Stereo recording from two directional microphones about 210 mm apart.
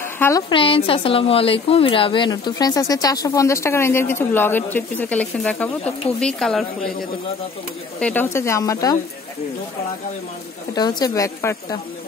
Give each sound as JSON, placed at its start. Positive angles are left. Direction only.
{"t": 0.0, "sound": "a sound", "side_deg": 10}
{"t": 0.5, "sound": "a woman's voice", "side_deg": 25}
{"t": 8.0, "sound": "a woman's voice", "side_deg": 10}
{"t": 10.7, "sound": "a woman's voice", "side_deg": 20}